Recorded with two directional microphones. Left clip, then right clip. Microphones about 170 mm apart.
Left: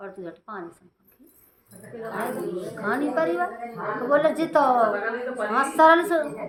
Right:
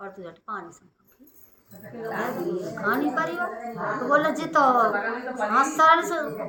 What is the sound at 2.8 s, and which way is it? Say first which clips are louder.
A woman's voice: left 1 dB; 25° left (ahead or behind).